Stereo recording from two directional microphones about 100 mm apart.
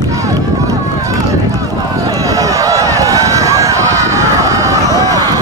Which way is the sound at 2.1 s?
35° right (ahead or behind).